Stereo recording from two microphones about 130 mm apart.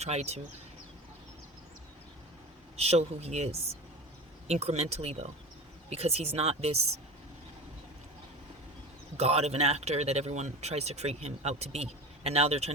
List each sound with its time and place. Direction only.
0.0 s speech: 55° right (ahead or behind)
2.7 s speech: 55° right (ahead or behind)
9.1 s speech: 55° right (ahead or behind)